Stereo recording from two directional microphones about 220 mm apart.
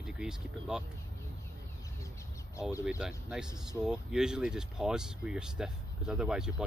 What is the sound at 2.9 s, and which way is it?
Speech, 5° right (ahead or behind).